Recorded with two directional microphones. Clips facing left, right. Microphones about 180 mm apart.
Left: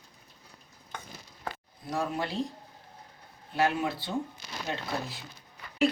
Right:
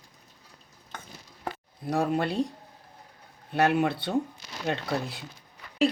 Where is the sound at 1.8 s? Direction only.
60° right (ahead or behind).